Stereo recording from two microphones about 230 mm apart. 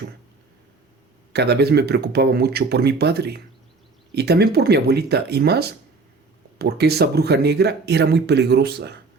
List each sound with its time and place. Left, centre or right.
1.3 s speech: right